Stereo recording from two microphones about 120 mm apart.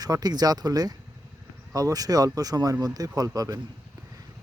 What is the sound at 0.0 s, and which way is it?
Speech, 35° right (ahead or behind).